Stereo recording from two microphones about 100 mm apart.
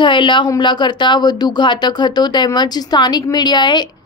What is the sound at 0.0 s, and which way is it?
A woman's voice, 50° left (ahead or behind).